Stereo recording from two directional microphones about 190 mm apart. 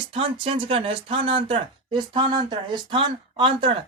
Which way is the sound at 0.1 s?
30° right (ahead or behind).